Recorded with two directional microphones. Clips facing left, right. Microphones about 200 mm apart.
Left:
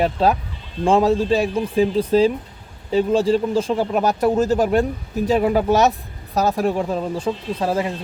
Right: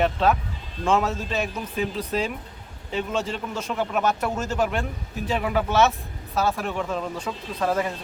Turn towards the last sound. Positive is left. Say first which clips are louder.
# left 3 dB
turn(degrees=30)  # may be behind; listen again after turning